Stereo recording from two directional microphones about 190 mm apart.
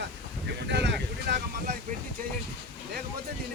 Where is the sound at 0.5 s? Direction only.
65° right (ahead or behind).